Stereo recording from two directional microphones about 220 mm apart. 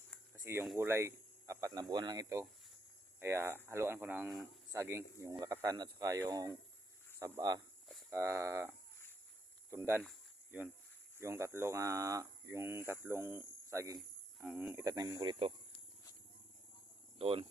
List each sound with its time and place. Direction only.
0.4 s speech: 10° right (ahead or behind)
9.6 s speech: 10° right (ahead or behind)
10.0 s cricket: 5° right (ahead or behind)
11.2 s speech: 10° right (ahead or behind)
17.2 s speech: 25° right (ahead or behind)